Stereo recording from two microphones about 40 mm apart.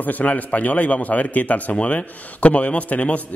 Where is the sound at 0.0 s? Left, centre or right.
Left.